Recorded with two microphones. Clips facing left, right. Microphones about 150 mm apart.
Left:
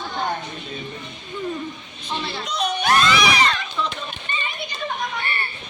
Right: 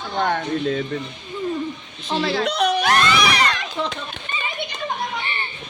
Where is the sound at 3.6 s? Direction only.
65° right (ahead or behind).